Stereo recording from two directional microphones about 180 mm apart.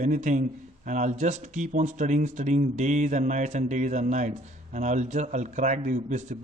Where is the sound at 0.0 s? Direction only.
45° right (ahead or behind).